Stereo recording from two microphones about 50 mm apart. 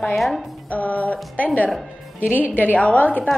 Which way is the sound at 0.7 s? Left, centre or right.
Left.